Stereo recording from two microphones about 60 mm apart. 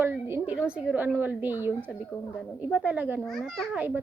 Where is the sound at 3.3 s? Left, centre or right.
Centre.